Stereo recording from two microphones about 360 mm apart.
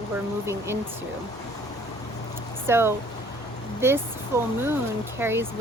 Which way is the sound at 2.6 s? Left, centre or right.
Centre.